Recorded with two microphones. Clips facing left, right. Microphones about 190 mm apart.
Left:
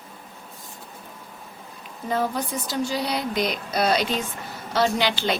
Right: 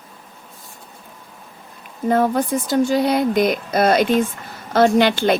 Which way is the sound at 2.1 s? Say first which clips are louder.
Right 8 dB; 50° right (ahead or behind).